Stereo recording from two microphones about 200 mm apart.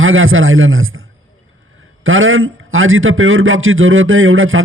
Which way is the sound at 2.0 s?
85° right.